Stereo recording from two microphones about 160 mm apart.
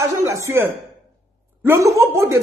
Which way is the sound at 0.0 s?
20° right (ahead or behind).